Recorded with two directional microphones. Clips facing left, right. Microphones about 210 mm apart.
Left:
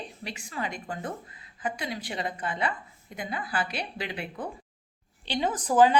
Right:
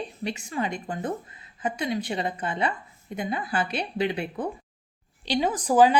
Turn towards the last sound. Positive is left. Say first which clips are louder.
# right 2 dB
turn(degrees=-10)  # may be behind; listen again after turning